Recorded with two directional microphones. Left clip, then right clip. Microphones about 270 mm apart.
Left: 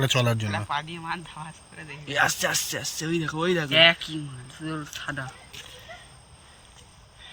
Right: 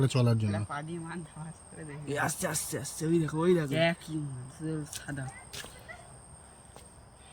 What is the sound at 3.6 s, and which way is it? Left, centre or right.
Speech, left.